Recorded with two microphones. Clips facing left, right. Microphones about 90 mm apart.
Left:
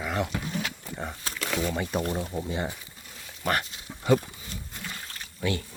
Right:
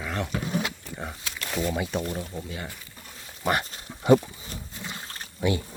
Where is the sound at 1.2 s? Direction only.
40° left (ahead or behind).